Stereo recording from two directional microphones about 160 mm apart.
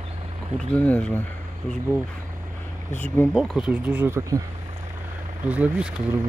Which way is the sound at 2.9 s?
10° left (ahead or behind).